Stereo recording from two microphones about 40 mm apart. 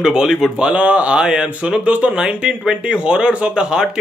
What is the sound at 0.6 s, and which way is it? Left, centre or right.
Speech, right.